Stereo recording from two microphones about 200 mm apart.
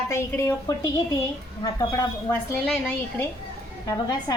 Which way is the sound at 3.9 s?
20° left (ahead or behind).